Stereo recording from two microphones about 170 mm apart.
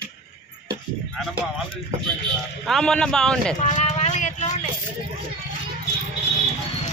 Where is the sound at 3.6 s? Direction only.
45° left (ahead or behind).